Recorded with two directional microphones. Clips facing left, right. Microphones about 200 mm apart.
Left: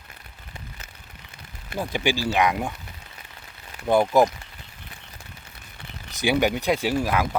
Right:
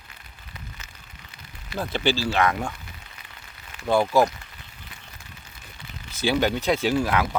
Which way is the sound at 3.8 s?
20° left (ahead or behind).